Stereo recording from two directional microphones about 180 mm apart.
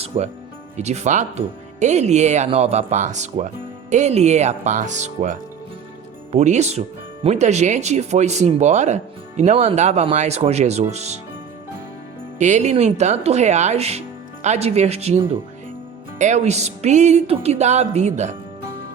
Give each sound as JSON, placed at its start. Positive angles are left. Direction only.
{"t": 0.1, "sound": "speech", "side_deg": -35}
{"t": 12.4, "sound": "speech", "side_deg": -40}